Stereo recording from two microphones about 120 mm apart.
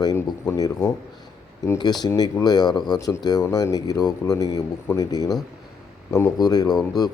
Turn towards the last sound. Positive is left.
turn(degrees=35)  # may be behind; listen again after turning